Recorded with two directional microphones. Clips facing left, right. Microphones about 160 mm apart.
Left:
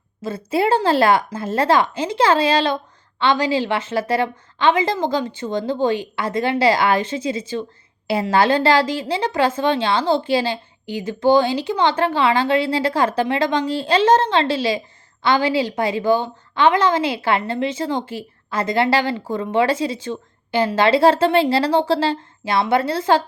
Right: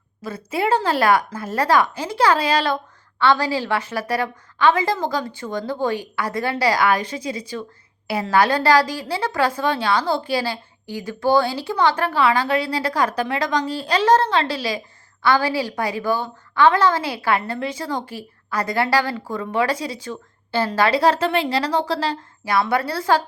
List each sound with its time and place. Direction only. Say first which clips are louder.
0.2 s a woman's voice: left 4 dB; 30° left (ahead or behind)